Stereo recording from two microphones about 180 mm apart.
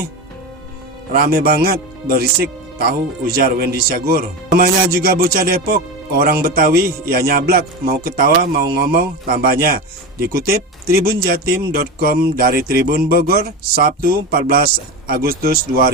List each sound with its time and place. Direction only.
1.1 s speech: 55° right (ahead or behind)